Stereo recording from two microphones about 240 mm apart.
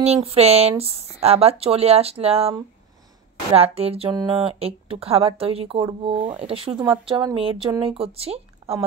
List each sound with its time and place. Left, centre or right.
0.0 s speech: right
3.5 s speech: right